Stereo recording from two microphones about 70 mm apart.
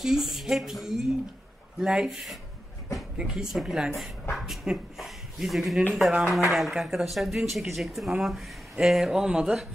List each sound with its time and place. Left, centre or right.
0.0 s speech: centre